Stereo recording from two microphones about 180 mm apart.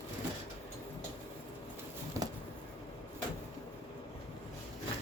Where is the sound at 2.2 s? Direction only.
15° right (ahead or behind).